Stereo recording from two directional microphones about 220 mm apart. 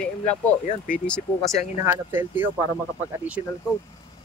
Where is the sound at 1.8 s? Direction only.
10° right (ahead or behind).